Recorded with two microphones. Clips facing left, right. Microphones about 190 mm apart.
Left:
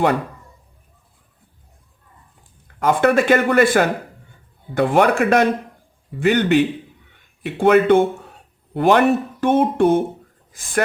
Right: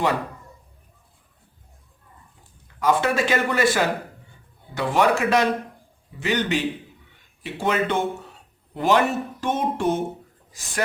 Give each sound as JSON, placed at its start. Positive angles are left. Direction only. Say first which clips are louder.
{"t": 2.8, "sound": "a man's voice", "louder": "left 5 dB", "side_deg": 55}